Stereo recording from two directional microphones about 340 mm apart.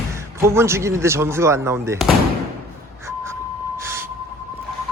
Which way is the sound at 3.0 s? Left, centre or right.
Centre.